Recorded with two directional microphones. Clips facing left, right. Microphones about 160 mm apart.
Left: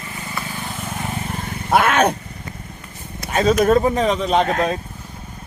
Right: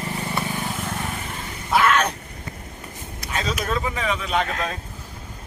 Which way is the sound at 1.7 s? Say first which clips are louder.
Left 4 dB; 55° left (ahead or behind).